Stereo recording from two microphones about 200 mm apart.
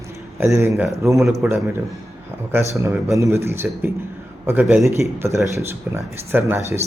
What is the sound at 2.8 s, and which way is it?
Speech, 15° right (ahead or behind).